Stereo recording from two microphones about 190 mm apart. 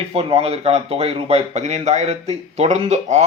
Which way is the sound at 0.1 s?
30° right (ahead or behind).